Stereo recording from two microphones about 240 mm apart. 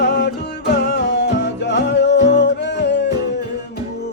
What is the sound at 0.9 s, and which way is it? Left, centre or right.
Music, left.